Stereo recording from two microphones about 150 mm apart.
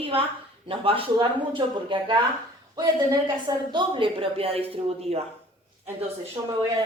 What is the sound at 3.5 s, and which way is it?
Speech, 30° right (ahead or behind).